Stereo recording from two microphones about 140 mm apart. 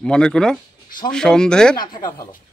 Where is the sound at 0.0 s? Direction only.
5° left (ahead or behind).